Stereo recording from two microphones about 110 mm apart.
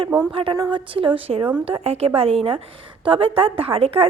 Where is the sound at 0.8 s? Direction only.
50° right (ahead or behind).